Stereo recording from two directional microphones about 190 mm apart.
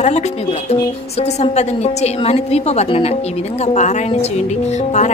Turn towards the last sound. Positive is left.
turn(degrees=35)  # may be behind; listen again after turning